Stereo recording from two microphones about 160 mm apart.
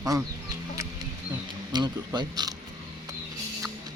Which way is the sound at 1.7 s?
25° right (ahead or behind).